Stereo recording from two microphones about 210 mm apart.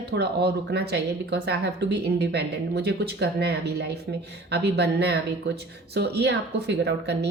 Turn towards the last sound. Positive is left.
turn(degrees=-55)  # may be behind; listen again after turning